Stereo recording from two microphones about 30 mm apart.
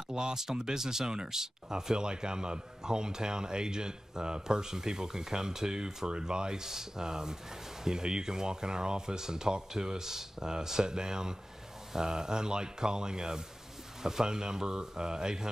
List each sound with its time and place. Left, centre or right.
0.1 s speech: right